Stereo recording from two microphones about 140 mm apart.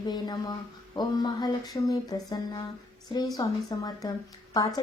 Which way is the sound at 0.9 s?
30° left (ahead or behind).